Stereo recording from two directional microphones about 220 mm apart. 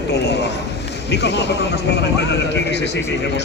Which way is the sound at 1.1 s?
50° left (ahead or behind).